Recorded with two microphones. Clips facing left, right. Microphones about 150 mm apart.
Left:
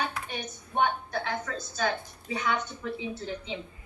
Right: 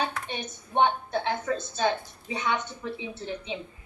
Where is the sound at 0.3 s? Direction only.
25° right (ahead or behind).